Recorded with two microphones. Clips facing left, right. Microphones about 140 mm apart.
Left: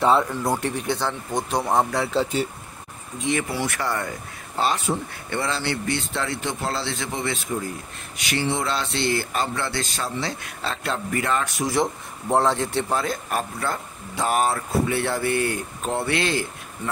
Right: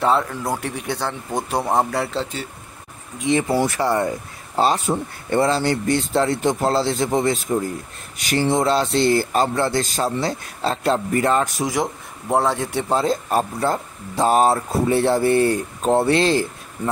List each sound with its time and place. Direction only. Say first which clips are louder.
0.0 s speech: even; centre (ahead or behind)
3.3 s speech: right 6 dB; 25° right (ahead or behind)
4.8 s speech: right 3 dB; 40° right (ahead or behind)
8.2 s a sound: right 6 dB; 45° right (ahead or behind)
8.9 s speech: right 7 dB; 40° right (ahead or behind)
11.6 s a man's voice: even; 10° right (ahead or behind)
12.9 s speech: right 6 dB; 25° right (ahead or behind)